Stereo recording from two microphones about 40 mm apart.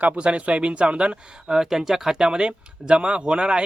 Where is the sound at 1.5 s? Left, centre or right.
Centre.